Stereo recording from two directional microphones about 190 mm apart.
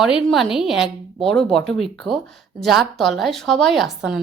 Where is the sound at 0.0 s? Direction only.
Centre (ahead or behind).